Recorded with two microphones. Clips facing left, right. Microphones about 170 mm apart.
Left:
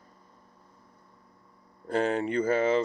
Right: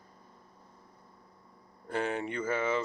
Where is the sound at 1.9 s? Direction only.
35° left (ahead or behind).